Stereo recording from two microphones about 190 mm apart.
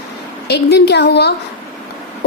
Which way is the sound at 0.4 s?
60° left (ahead or behind).